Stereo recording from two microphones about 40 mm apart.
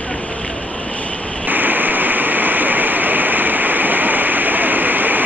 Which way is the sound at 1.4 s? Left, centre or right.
Right.